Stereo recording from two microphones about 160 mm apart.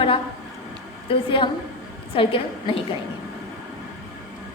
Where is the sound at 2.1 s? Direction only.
35° left (ahead or behind).